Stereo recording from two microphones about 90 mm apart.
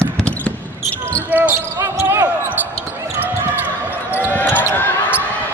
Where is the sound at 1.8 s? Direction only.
35° right (ahead or behind).